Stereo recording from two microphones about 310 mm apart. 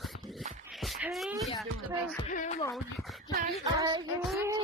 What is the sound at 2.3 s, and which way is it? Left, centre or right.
Speech, left.